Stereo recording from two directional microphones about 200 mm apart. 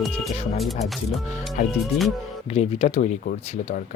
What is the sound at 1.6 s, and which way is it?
Speech, 40° left (ahead or behind).